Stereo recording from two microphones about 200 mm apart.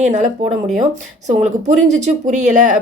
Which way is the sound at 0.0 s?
35° right (ahead or behind).